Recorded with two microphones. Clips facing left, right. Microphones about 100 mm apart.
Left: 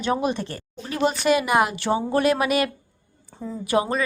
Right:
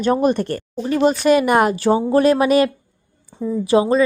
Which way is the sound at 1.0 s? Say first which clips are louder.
Right 5 dB; 40° right (ahead or behind).